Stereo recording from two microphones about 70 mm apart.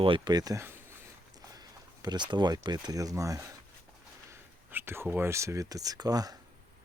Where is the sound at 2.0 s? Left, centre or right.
Right.